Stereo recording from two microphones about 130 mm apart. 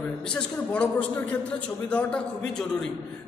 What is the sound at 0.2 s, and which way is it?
A woman's voice, 5° left (ahead or behind).